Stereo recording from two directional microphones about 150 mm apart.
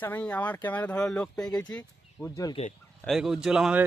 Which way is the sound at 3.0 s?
Centre (ahead or behind).